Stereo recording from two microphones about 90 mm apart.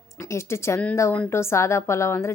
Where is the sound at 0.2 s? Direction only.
30° left (ahead or behind).